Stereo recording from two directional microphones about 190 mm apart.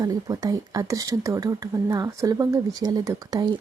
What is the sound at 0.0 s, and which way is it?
Speech, 20° right (ahead or behind).